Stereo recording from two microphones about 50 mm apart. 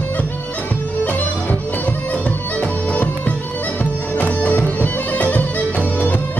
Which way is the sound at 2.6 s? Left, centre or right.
Left.